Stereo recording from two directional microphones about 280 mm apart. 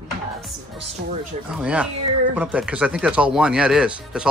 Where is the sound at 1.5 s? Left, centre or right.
Centre.